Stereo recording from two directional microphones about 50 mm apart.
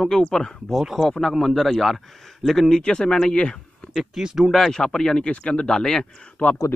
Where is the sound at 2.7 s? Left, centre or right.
Centre.